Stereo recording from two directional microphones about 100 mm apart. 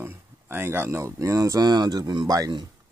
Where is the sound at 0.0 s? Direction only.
25° right (ahead or behind).